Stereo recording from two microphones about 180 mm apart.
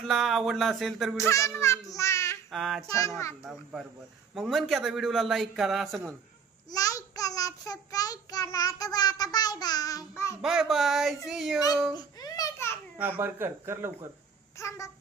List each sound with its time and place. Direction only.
0.1 s a man's voice: centre (ahead or behind)
1.1 s a child's voice: 15° left (ahead or behind)
2.5 s a man's voice: centre (ahead or behind)
4.3 s a man's voice: centre (ahead or behind)
6.7 s child singing: 20° left (ahead or behind)
10.4 s a man's voice: 5° right (ahead or behind)
12.2 s babbling: 20° left (ahead or behind)
12.9 s speech: 10° right (ahead or behind)
14.6 s a child's voice: 15° left (ahead or behind)